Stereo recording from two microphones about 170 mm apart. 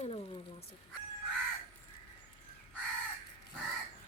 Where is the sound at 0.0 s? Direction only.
35° left (ahead or behind).